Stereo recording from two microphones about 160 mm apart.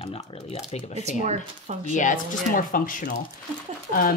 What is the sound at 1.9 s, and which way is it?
Speech, 50° left (ahead or behind).